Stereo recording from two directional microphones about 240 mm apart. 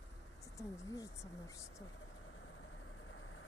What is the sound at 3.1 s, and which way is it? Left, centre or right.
Vehicle, left.